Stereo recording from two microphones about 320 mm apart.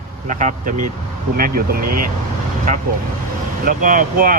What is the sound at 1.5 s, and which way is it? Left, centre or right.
Speech, right.